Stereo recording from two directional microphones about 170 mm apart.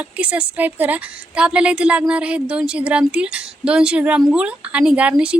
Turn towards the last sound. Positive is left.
turn(degrees=-5)  # may be behind; listen again after turning